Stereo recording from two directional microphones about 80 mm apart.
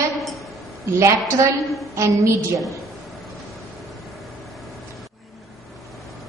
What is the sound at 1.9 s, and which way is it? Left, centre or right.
Speech, right.